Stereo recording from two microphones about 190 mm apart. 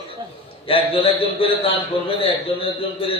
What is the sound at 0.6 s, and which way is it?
A man's voice, 30° left (ahead or behind).